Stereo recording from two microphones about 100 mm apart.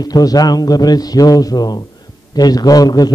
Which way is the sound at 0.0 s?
40° left (ahead or behind).